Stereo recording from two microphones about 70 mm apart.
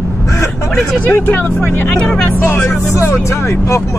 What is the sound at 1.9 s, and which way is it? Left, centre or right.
Speech, centre.